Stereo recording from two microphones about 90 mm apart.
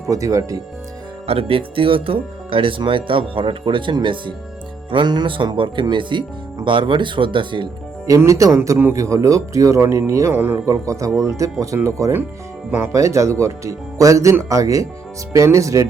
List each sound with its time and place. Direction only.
0.0 s speech: 35° right (ahead or behind)
1.3 s speech: 90° right; by 7.7 s 65° right (ahead or behind)
8.0 s speech: 40° right (ahead or behind)
10.7 s speech: 35° right (ahead or behind)